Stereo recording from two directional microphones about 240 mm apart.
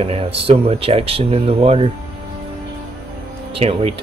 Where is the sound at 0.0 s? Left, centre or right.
Right.